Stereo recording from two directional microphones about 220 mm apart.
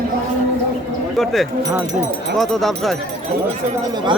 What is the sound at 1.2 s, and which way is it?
A man's voice, centre (ahead or behind).